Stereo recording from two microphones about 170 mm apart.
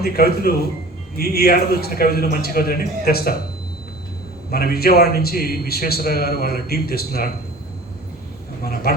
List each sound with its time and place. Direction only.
0.0 s a man's voice: 65° left (ahead or behind)
4.5 s a man's voice: 65° left (ahead or behind)
8.6 s a man's voice: 65° left (ahead or behind)